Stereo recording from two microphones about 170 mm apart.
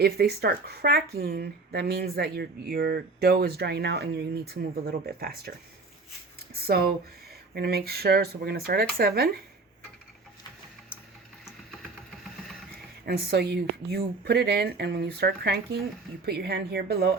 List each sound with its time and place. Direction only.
0.0 s speech: 70° right (ahead or behind)
6.5 s a sound: 65° right (ahead or behind)
7.5 s speech: 65° right (ahead or behind)
13.1 s speech: 75° right (ahead or behind)